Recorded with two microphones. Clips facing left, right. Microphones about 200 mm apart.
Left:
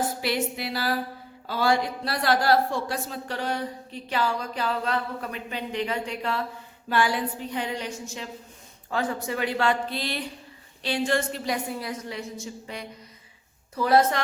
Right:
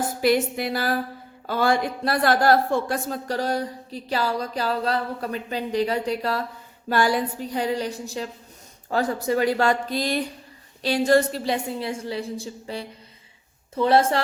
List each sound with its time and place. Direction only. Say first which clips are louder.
0.2 s a woman's voice: right 7 dB; 45° right (ahead or behind); by 14.2 s 30° right (ahead or behind)